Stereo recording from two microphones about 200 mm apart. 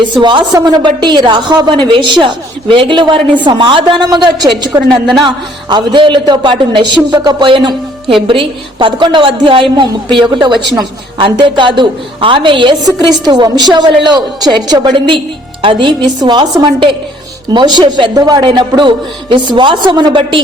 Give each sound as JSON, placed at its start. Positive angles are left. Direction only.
{"t": 0.0, "sound": "a woman's voice", "side_deg": -25}